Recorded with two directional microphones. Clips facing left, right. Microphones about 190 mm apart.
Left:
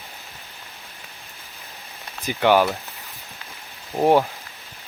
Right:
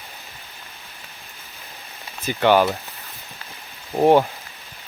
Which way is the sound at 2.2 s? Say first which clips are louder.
Right 1 dB; 10° left (ahead or behind).